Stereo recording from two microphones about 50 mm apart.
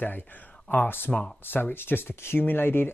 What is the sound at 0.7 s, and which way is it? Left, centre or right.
Speech, left.